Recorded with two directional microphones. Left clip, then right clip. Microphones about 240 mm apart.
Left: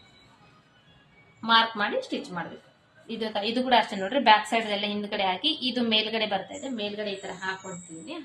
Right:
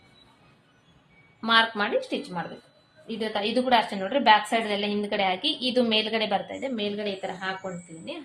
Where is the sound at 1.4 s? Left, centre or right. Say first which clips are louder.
Even; right.